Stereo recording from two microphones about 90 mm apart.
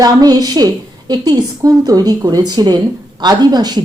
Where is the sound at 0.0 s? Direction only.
45° right (ahead or behind).